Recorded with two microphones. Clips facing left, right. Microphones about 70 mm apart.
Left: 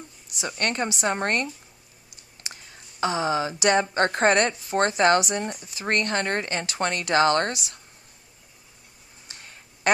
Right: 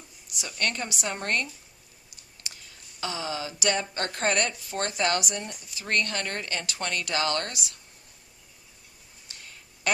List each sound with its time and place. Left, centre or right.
0.3 s speech: left
2.4 s a sound: left
3.0 s a woman's voice: left
9.2 s tick-tock: left